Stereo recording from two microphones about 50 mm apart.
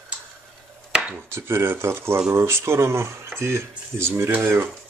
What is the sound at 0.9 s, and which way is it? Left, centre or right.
Chopping, centre.